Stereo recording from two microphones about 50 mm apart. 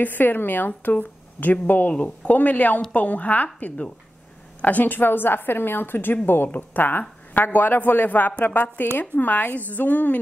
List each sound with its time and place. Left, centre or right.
0.0 s a woman's voice: left
4.6 s a woman's voice: left
8.3 s a woman's voice: left
9.1 s speech: left